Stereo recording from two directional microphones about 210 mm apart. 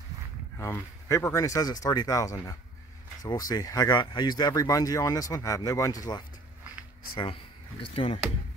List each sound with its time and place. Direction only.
0.6 s speech: 10° left (ahead or behind)
7.9 s speech: 25° left (ahead or behind)